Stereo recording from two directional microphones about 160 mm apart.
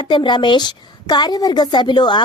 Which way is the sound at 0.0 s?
30° left (ahead or behind).